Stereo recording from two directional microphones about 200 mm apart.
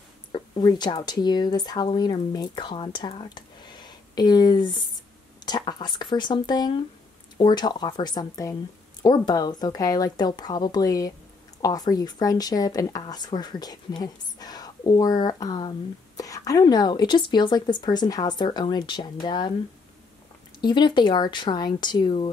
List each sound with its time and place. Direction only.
0.3 s speech: 20° left (ahead or behind)
20.6 s speech: 20° left (ahead or behind)